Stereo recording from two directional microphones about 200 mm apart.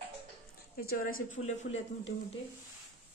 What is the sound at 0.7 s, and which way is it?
Speech, 45° left (ahead or behind).